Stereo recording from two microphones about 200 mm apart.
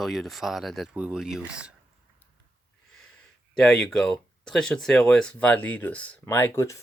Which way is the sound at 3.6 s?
5° left (ahead or behind).